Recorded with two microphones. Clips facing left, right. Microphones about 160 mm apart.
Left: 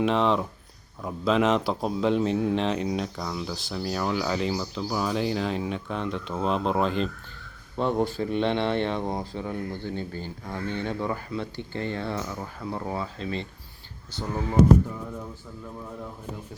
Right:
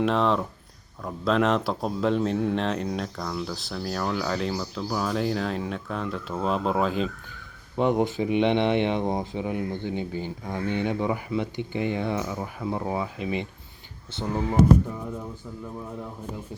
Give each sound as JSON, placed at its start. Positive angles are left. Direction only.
{"t": 0.0, "sound": "speech", "side_deg": 0}
{"t": 7.8, "sound": "speech", "side_deg": -15}